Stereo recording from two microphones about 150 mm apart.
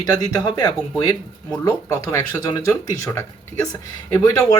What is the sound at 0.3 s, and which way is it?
Speech, 25° left (ahead or behind).